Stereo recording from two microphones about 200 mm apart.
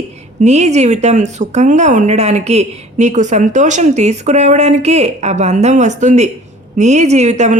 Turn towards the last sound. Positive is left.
turn(degrees=-35)  # may be behind; listen again after turning